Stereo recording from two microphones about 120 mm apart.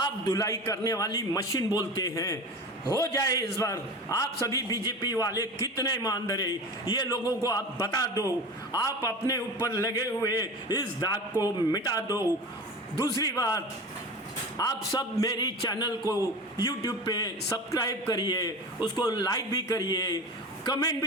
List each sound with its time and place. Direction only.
0.0 s a man's voice: 30° left (ahead or behind)
14.6 s a man's voice: 30° left (ahead or behind)